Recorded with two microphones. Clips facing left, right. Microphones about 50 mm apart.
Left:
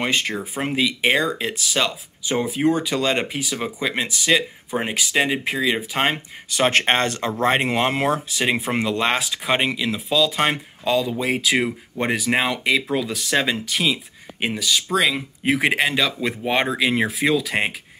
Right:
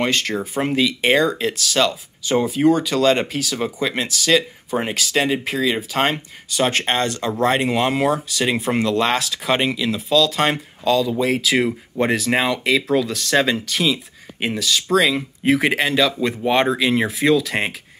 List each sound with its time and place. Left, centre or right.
0.0 s speech: centre
6.5 s speech: left
8.9 s speech: centre